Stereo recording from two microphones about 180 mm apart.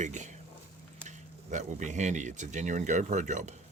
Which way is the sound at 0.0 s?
40° right (ahead or behind).